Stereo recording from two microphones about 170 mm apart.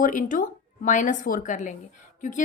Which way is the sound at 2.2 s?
50° left (ahead or behind).